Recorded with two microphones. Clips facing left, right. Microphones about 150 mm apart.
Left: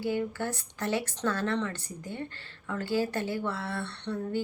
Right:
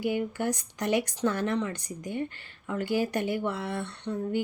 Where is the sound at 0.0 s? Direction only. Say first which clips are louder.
Right 2 dB; 15° right (ahead or behind).